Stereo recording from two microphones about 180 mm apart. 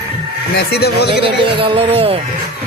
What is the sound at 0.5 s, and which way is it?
Speech, 60° left (ahead or behind).